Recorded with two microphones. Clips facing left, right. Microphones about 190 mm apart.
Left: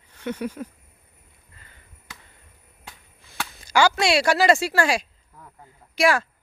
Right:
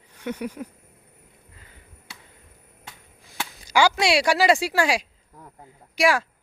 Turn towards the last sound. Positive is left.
turn(degrees=-10)  # may be behind; listen again after turning